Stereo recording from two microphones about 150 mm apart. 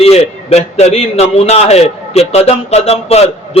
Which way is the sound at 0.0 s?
45° left (ahead or behind).